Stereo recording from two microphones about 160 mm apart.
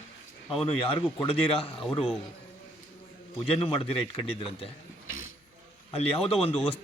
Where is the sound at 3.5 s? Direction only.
35° left (ahead or behind).